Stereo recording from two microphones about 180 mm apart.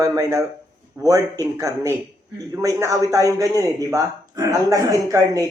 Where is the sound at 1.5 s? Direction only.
15° right (ahead or behind).